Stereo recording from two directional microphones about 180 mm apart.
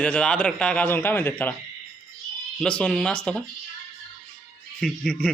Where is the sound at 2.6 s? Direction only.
5° left (ahead or behind).